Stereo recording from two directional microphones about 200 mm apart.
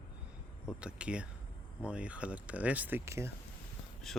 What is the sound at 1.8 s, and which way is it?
Speech, 5° right (ahead or behind).